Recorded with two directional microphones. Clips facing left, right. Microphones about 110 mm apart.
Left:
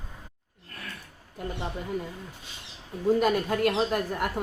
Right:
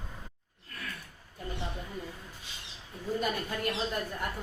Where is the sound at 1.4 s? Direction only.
80° left.